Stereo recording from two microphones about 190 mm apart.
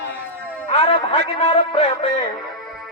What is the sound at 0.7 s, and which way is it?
Music, 30° left (ahead or behind).